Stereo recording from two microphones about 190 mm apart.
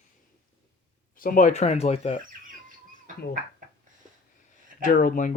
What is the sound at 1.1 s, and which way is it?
Speech, 45° left (ahead or behind).